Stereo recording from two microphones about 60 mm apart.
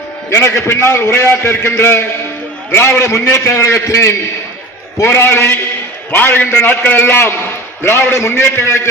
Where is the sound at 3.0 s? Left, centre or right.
Left.